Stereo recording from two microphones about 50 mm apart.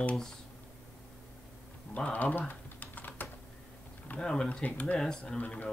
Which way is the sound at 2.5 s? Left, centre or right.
Left.